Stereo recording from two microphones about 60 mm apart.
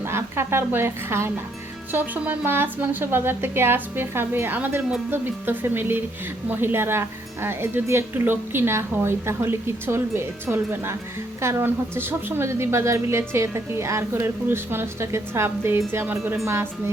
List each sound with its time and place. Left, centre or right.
0.0 s a woman's voice: right
1.9 s a woman's voice: right